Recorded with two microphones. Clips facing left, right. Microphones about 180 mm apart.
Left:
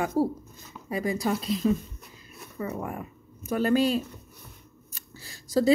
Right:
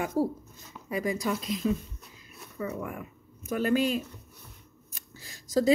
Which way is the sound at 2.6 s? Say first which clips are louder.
Left 2 dB; 40° left (ahead or behind).